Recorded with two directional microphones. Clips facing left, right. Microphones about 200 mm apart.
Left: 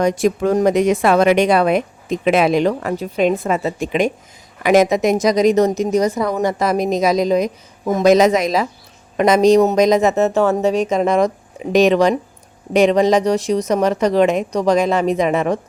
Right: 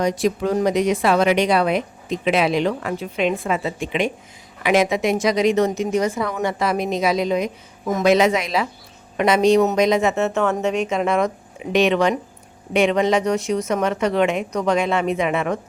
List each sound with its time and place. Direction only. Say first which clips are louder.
0.0 s speech: left 4 dB; 50° left (ahead or behind)